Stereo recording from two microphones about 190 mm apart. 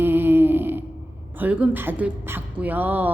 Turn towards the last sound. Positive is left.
turn(degrees=-10)  # may be behind; listen again after turning